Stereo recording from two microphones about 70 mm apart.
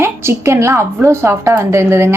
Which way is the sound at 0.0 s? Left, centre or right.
Right.